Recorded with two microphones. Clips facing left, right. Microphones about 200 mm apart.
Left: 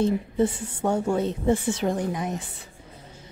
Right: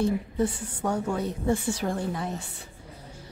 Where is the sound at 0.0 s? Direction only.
25° left (ahead or behind).